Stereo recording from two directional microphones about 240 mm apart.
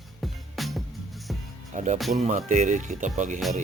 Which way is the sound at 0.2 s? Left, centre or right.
Centre.